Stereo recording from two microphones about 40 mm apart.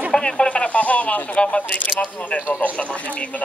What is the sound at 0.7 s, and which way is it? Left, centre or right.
Speech, left.